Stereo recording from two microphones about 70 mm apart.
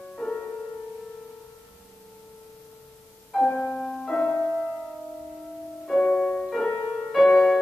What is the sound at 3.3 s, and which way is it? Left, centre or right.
Music, centre.